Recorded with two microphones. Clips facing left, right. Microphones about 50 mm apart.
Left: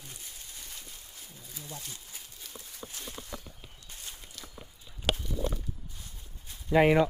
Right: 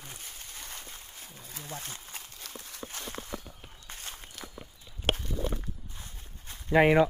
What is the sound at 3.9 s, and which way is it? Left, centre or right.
Walk, right.